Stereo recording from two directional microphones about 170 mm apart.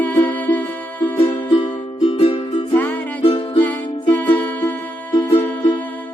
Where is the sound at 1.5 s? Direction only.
30° left (ahead or behind).